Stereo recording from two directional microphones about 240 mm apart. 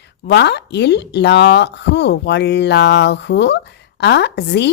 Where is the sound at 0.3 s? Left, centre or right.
Left.